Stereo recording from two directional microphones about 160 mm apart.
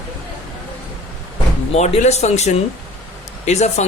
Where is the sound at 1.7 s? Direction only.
45° left (ahead or behind).